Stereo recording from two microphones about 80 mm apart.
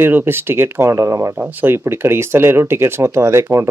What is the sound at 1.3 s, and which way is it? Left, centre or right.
Speech, right.